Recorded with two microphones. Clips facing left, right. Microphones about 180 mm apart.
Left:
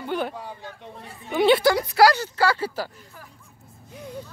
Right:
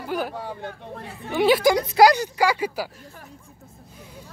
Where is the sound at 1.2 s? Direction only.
5° right (ahead or behind).